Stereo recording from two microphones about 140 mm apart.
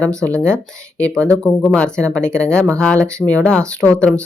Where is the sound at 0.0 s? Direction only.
5° left (ahead or behind).